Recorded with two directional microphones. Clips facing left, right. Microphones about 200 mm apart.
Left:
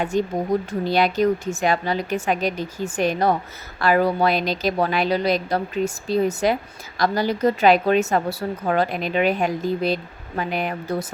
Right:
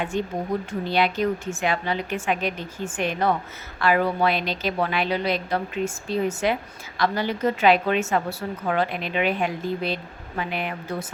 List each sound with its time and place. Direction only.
0.0 s a woman's voice: 40° left (ahead or behind)